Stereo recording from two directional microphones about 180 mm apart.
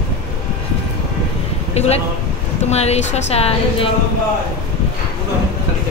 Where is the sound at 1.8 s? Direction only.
35° left (ahead or behind).